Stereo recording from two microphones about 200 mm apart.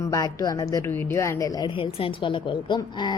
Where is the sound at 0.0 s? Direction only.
15° left (ahead or behind).